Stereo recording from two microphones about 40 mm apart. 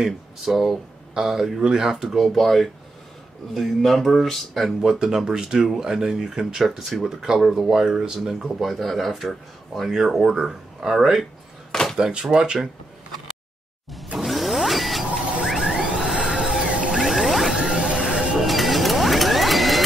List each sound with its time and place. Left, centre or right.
0.0 s speech: centre
5.0 s speech: centre
9.8 s speech: centre
11.7 s a sound: centre
12.0 s speech: right
14.1 s a sound: centre
15.6 s printer: centre
16.6 s vehicle: right
16.9 s a sound: centre
17.7 s a sound: centre
18.1 s printer: right
18.4 s sewing machine: centre